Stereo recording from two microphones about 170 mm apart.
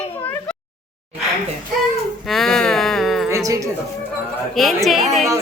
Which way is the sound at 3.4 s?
20° right (ahead or behind).